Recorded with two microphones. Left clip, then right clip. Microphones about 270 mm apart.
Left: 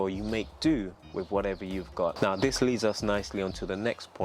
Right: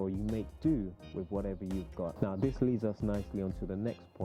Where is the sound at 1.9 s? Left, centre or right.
Left.